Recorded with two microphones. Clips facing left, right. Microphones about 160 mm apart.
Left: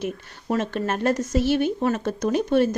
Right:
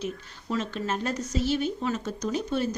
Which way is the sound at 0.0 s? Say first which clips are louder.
Left 4 dB; 55° left (ahead or behind).